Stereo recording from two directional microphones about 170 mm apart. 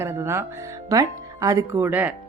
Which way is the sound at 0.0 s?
15° right (ahead or behind).